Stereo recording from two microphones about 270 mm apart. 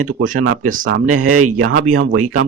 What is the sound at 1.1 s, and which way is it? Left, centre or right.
Speech, right.